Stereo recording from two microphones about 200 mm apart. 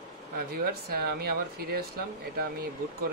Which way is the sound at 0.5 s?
50° right (ahead or behind).